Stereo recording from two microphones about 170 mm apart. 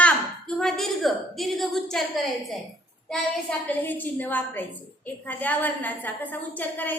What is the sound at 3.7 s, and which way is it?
A woman's voice, 10° left (ahead or behind).